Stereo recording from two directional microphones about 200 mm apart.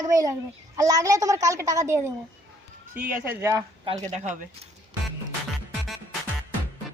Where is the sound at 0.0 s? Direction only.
15° right (ahead or behind).